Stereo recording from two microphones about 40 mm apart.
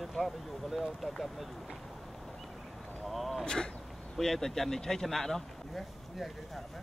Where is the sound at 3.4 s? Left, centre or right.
Left.